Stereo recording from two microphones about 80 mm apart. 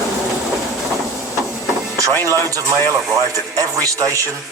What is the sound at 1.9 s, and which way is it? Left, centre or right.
Vehicle, right.